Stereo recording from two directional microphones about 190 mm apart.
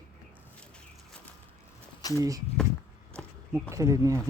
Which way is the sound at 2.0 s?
20° left (ahead or behind).